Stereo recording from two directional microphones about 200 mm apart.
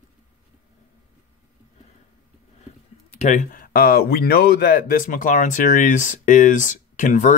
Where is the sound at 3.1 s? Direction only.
35° left (ahead or behind).